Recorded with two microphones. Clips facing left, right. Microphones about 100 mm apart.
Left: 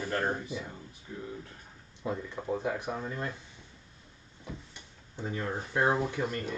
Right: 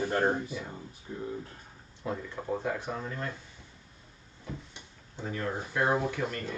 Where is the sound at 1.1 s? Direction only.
40° right (ahead or behind).